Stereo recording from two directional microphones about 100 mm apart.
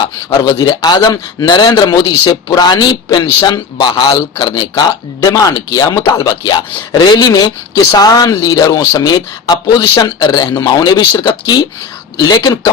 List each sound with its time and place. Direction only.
0.4 s a man's voice: 40° left (ahead or behind)